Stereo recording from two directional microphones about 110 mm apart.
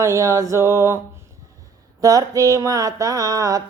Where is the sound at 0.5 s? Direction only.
25° right (ahead or behind).